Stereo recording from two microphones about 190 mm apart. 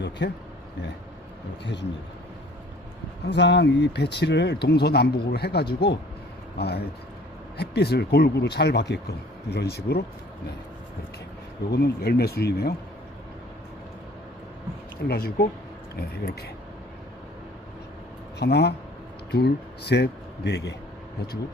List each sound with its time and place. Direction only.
0.2 s speech: 65° left (ahead or behind)
3.2 s speech: 65° left (ahead or behind)
11.7 s speech: 60° left (ahead or behind)
15.0 s speech: 55° left (ahead or behind)
18.3 s speech: 60° left (ahead or behind)